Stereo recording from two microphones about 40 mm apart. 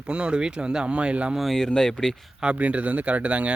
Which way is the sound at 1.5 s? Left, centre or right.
Centre.